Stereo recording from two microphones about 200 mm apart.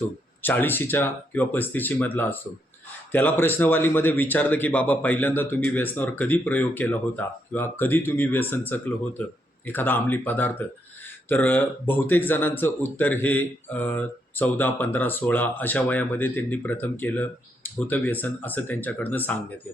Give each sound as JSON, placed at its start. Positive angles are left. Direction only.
{"t": 0.4, "sound": "speech", "side_deg": 10}